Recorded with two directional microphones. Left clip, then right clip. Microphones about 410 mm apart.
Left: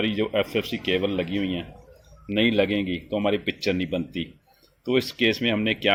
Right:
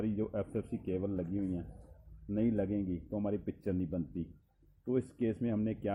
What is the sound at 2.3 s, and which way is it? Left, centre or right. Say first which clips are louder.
Speech: left 12 dB; left.